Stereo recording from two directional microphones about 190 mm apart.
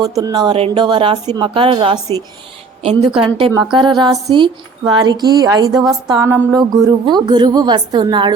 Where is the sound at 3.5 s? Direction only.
25° right (ahead or behind).